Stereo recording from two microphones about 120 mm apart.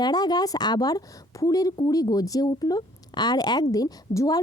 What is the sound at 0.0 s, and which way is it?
A woman's voice, 35° left (ahead or behind).